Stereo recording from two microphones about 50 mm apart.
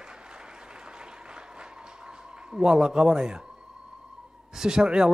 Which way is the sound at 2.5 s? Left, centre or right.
Centre.